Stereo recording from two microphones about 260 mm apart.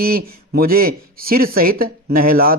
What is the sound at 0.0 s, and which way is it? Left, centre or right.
Speech, right.